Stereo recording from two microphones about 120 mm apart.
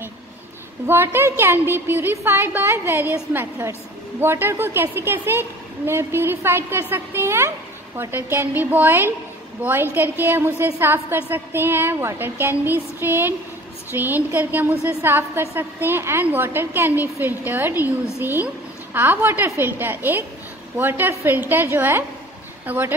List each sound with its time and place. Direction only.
0.8 s a woman's voice: 20° right (ahead or behind)